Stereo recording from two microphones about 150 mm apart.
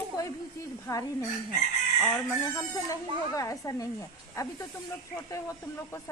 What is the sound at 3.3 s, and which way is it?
Speech, 25° left (ahead or behind).